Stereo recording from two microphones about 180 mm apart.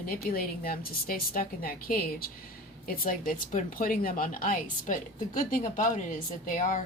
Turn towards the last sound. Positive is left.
turn(degrees=50)  # may be behind; listen again after turning